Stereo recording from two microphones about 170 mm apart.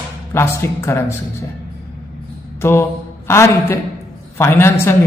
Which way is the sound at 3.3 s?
15° left (ahead or behind).